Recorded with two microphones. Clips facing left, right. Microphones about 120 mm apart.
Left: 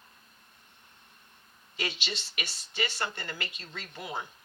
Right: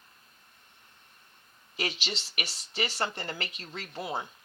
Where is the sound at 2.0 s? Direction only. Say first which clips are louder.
Right 1 dB; 30° right (ahead or behind).